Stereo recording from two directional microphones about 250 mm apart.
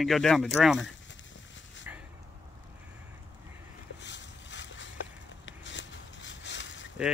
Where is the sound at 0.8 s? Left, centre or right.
Left.